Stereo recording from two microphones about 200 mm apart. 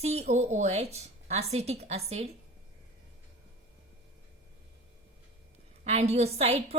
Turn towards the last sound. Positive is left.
turn(degrees=-30)  # may be behind; listen again after turning